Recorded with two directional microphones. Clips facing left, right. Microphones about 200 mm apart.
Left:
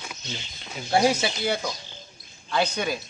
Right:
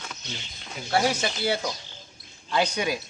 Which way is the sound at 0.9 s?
10° left (ahead or behind).